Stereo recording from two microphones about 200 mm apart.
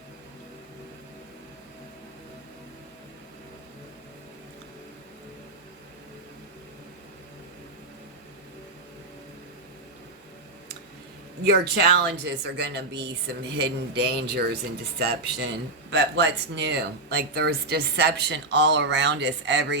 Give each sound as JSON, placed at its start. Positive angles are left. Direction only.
{"t": 11.5, "sound": "speech", "side_deg": -55}